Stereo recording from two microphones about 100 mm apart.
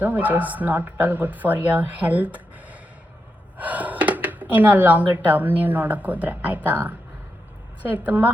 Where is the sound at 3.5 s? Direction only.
15° right (ahead or behind).